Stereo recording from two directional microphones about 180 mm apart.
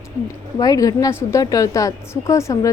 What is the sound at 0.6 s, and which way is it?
A woman's voice, 20° left (ahead or behind).